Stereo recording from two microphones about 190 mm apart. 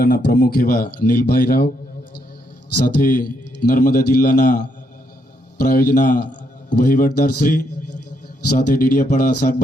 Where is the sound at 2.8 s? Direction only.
45° left (ahead or behind).